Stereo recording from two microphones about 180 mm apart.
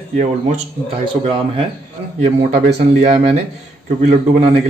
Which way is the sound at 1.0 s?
30° right (ahead or behind).